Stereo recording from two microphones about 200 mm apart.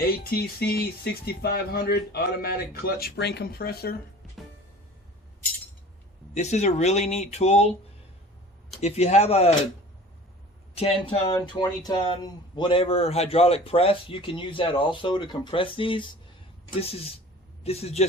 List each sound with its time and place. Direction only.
0.0 s speech: 50° left (ahead or behind)
6.3 s speech: 35° left (ahead or behind)
8.8 s speech: 35° left (ahead or behind)
10.8 s speech: 30° left (ahead or behind)
11.3 s speech: 20° left (ahead or behind)
17.6 s speech: 30° left (ahead or behind)